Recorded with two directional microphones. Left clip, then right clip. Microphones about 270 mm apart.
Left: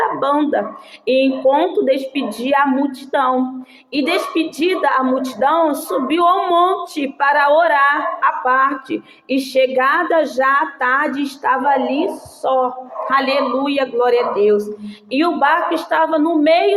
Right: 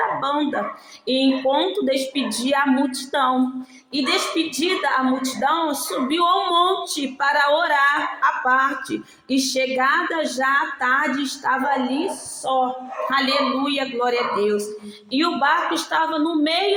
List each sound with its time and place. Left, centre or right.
0.0 s speech: right